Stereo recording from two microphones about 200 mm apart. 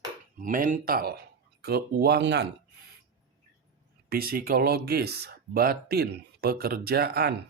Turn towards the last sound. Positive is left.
turn(degrees=-50)  # may be behind; listen again after turning